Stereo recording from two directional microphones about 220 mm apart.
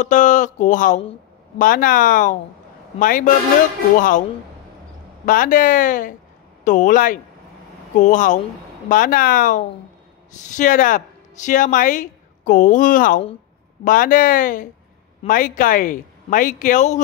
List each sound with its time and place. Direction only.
0.0 s speech: 35° left (ahead or behind)
5.2 s speech: 40° left (ahead or behind)